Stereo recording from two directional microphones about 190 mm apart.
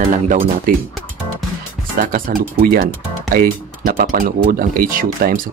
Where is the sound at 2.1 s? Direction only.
50° right (ahead or behind).